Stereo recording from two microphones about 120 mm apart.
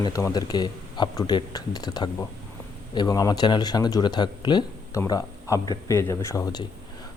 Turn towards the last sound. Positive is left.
turn(degrees=30)  # may be behind; listen again after turning